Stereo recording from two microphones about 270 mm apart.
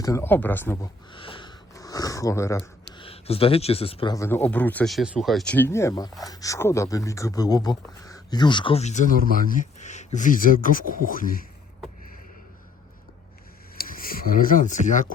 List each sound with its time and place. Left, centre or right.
0.0 s speech: centre; by 11.4 s left
13.7 s speech: left